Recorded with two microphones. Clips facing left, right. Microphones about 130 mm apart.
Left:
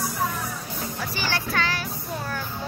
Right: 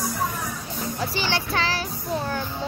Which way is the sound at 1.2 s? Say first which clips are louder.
Even; 30° right (ahead or behind).